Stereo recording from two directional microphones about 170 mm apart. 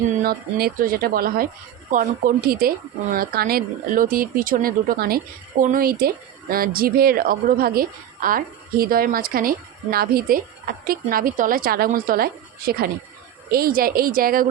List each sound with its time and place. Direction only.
0.2 s a woman's voice: 60° right (ahead or behind)